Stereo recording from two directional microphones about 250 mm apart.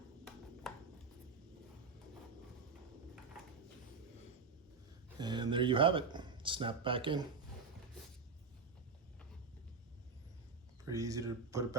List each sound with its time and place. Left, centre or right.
0.7 s a sound: centre
5.2 s speech: centre
10.8 s speech: centre